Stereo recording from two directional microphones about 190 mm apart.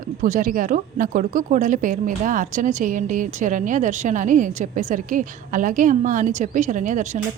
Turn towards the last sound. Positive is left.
turn(degrees=-40)  # may be behind; listen again after turning